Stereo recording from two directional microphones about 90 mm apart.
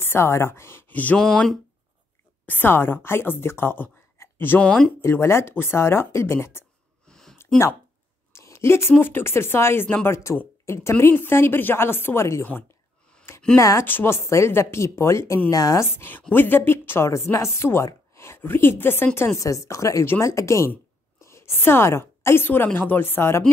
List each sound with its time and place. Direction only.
0.0 s a woman's voice: 30° left (ahead or behind)
1.2 s speech: 5° left (ahead or behind)
2.4 s speech: 20° left (ahead or behind)
4.6 s speech: 10° left (ahead or behind)
5.0 s speech: 30° left (ahead or behind)
7.1 s a sound: 5° left (ahead or behind)
8.3 s a sound: 30° left (ahead or behind)
8.9 s speech: 25° left (ahead or behind)
13.6 s speech: 35° left (ahead or behind)
16.0 s a woman's voice: 20° left (ahead or behind)